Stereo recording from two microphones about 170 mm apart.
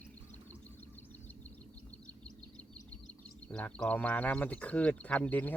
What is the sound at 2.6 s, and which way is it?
Speech, 5° left (ahead or behind).